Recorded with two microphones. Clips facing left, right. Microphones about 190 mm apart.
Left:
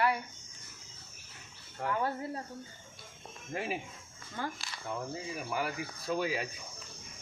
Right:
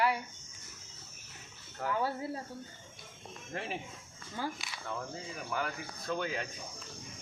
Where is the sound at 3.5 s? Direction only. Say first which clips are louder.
Left 3 dB; 5° left (ahead or behind).